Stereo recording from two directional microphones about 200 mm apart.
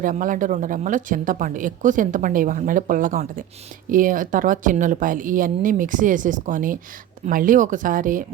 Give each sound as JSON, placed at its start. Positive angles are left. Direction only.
{"t": 0.0, "sound": "a woman's voice", "side_deg": -40}